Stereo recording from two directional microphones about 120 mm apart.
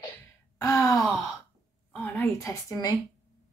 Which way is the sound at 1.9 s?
15° left (ahead or behind).